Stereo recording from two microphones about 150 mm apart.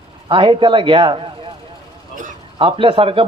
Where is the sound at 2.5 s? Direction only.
35° right (ahead or behind).